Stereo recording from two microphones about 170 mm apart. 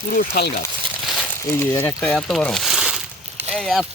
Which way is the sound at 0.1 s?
65° left (ahead or behind).